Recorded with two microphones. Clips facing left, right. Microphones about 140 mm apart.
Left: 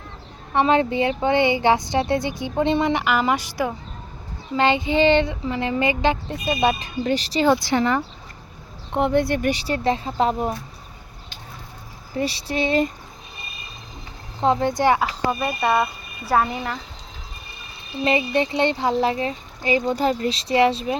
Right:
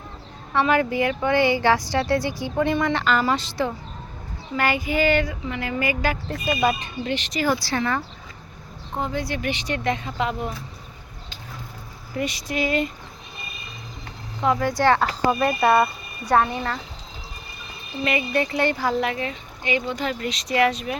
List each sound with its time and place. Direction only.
0.5 s speech: 25° left (ahead or behind)
4.5 s speech: 25° left (ahead or behind)
7.4 s speech: 20° left (ahead or behind)
9.0 s speech: 65° left (ahead or behind)
9.5 s speech: 35° left (ahead or behind)
12.1 s speech: 30° left (ahead or behind)
14.4 s speech: 25° left (ahead or behind)
14.9 s speech: centre (ahead or behind)
18.0 s speech: 25° left (ahead or behind)